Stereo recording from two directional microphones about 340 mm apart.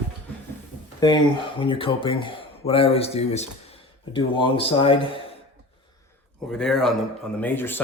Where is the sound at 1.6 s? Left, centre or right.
Centre.